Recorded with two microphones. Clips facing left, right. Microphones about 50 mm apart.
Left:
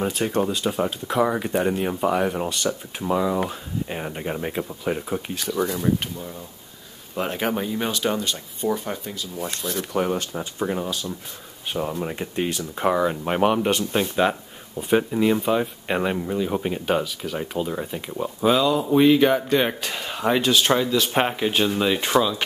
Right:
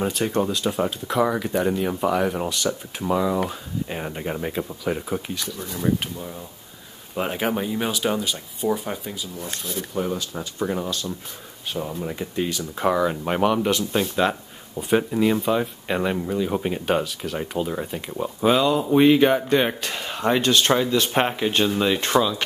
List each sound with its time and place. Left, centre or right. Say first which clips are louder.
0.0 s speech: even; centre
5.4 s speech: left 8 dB; left
5.8 s speech: even; centre
9.7 s speech: left 3 dB; left
10.6 s speech: even; centre
11.7 s speech: left 2 dB; centre
12.2 s speech: right 2 dB; left
12.5 s speech: even; centre
13.4 s speech: left 1 dB; centre
14.8 s speech: even; centre